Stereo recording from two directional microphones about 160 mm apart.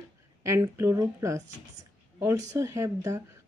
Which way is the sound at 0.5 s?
20° right (ahead or behind).